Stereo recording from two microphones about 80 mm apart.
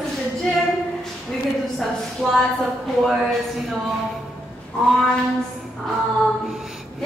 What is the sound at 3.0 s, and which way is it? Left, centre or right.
Speech, centre.